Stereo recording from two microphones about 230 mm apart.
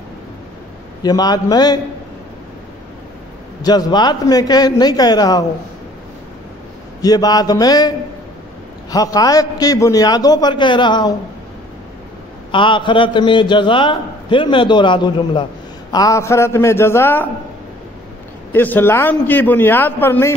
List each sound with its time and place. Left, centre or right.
1.0 s a man's voice: centre
3.6 s a man's voice: centre
7.0 s a man's voice: centre
8.9 s a man's voice: centre
12.4 s a man's voice: left
18.5 s a man's voice: centre